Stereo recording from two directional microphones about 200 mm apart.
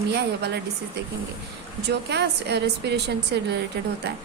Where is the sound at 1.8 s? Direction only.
60° right (ahead or behind).